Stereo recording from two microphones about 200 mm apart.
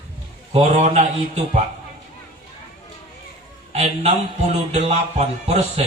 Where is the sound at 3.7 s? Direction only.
30° right (ahead or behind).